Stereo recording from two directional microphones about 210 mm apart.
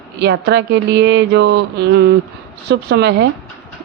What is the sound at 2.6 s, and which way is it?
Speech, 50° right (ahead or behind).